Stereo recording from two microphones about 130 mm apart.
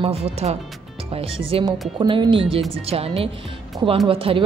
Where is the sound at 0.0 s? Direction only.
50° right (ahead or behind).